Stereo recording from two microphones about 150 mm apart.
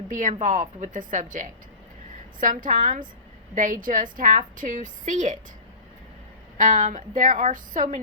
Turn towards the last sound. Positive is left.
turn(degrees=-60)  # may be behind; listen again after turning